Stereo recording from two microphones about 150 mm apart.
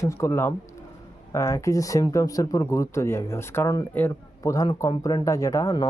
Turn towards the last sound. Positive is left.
turn(degrees=25)  # may be behind; listen again after turning